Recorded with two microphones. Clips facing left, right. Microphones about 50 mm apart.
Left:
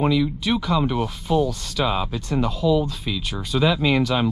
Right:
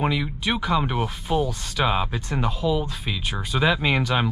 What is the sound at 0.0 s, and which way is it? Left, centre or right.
Speech, centre.